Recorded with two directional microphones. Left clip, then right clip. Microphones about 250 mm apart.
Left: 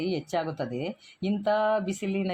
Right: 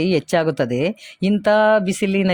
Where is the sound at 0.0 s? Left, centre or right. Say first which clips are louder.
Right 11 dB; right.